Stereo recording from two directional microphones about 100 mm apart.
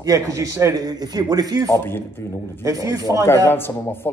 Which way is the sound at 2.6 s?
35° right (ahead or behind).